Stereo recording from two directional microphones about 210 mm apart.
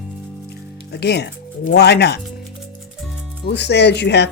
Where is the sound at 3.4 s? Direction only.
55° left (ahead or behind).